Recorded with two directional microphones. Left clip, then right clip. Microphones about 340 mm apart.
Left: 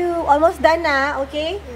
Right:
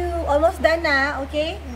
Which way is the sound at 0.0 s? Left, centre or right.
Centre.